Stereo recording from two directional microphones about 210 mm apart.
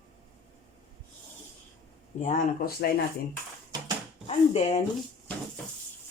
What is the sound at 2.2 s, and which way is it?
Speech, 40° left (ahead or behind).